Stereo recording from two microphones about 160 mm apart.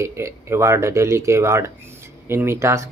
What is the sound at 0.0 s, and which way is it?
Speech, 15° right (ahead or behind).